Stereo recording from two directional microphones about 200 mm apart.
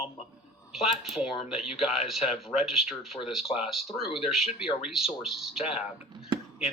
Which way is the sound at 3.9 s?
30° left (ahead or behind).